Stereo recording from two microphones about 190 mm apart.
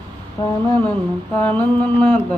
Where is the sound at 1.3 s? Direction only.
10° left (ahead or behind).